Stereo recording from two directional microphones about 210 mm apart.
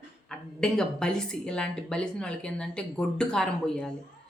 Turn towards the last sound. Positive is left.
turn(degrees=5)  # may be behind; listen again after turning